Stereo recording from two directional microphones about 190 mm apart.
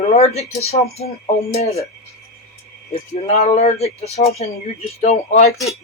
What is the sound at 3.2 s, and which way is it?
Speech, 35° left (ahead or behind).